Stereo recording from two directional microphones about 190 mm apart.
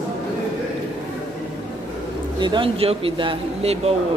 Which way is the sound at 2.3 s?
25° right (ahead or behind).